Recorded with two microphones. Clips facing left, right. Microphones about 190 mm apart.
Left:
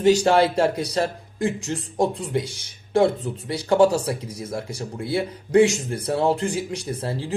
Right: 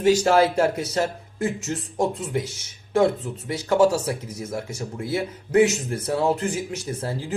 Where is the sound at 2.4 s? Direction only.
30° left (ahead or behind).